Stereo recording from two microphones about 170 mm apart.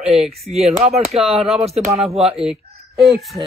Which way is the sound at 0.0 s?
40° right (ahead or behind).